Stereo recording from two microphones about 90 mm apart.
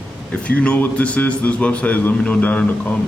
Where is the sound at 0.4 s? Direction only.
15° left (ahead or behind).